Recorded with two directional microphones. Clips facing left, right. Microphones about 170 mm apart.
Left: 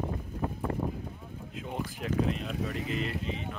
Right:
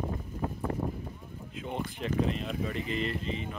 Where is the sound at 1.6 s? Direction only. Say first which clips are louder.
Right 1 dB; 5° left (ahead or behind).